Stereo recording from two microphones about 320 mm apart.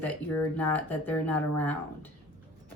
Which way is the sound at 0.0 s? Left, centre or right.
Centre.